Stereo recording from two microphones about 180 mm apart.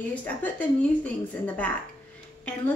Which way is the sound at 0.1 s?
10° left (ahead or behind).